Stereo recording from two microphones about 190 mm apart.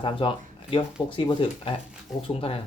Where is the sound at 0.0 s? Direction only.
25° left (ahead or behind).